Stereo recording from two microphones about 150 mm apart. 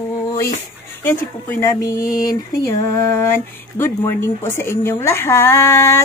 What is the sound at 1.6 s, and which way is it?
Speech, 20° left (ahead or behind).